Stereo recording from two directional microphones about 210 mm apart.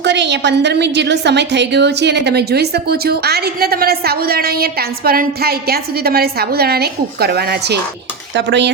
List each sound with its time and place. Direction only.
0.0 s a woman's voice: 55° right (ahead or behind)